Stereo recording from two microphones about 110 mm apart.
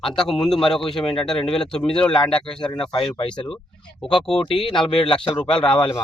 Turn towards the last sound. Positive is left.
turn(degrees=10)  # may be behind; listen again after turning